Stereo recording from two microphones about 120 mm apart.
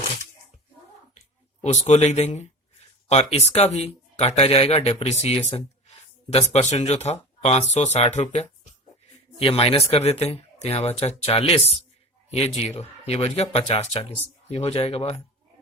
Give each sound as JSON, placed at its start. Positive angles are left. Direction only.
{"t": 1.6, "sound": "speech", "side_deg": 70}
{"t": 9.4, "sound": "speech", "side_deg": 55}
{"t": 13.1, "sound": "speech", "side_deg": 55}